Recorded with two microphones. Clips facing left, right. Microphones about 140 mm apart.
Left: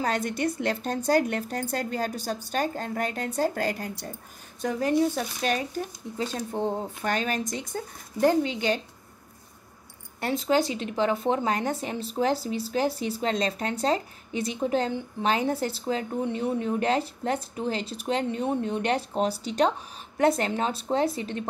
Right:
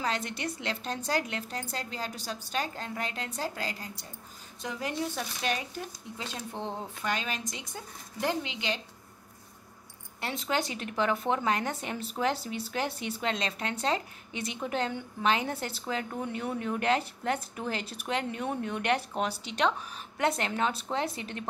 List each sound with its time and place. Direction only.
0.0 s a woman's voice: 45° left (ahead or behind)
4.6 s a woman's voice: 45° left (ahead or behind)
10.2 s speech: 40° left (ahead or behind)